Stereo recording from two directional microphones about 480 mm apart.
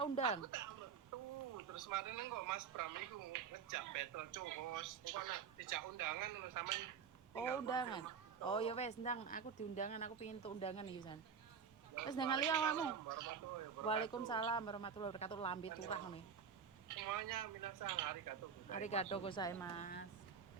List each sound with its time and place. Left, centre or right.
0.0 s a sound: centre
0.4 s speech: right
7.7 s speech: centre
12.5 s speech: right
13.8 s speech: centre
16.9 s speech: right
18.7 s speech: centre